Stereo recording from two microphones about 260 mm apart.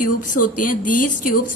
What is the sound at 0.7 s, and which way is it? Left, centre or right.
Speech, left.